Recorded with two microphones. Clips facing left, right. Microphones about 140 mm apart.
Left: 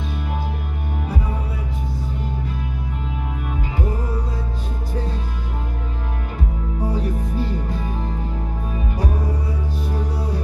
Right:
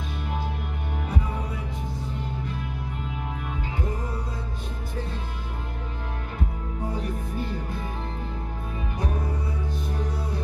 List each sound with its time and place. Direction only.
6.8 s music: 75° left (ahead or behind)